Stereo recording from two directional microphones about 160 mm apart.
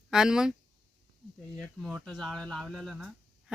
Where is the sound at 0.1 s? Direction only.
5° right (ahead or behind).